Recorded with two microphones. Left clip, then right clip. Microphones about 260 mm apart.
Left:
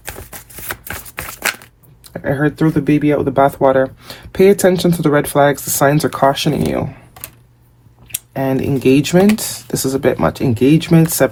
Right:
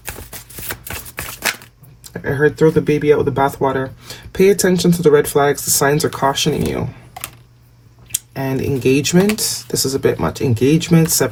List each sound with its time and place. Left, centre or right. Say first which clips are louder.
0.3 s a sound: left 2 dB; centre
2.2 s speech: right 3 dB; centre
8.0 s speech: left 4 dB; centre